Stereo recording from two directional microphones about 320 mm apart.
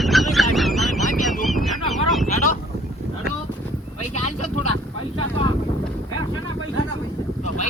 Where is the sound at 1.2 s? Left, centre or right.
Centre.